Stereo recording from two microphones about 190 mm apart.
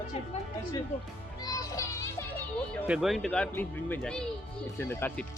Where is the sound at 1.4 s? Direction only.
20° left (ahead or behind).